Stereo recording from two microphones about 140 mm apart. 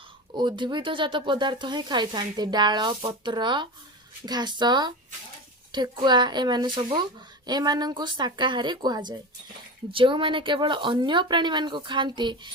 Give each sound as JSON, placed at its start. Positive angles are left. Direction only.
{"t": 0.3, "sound": "speech", "side_deg": -35}